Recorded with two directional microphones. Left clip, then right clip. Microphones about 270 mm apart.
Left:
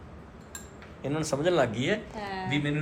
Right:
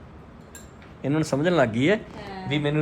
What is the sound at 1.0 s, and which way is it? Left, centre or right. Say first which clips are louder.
Speech: right 4 dB; right.